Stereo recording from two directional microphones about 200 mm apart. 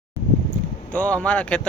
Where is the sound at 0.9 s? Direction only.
5° left (ahead or behind).